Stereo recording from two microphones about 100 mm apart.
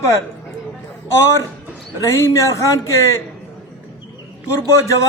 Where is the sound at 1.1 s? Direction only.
30° left (ahead or behind).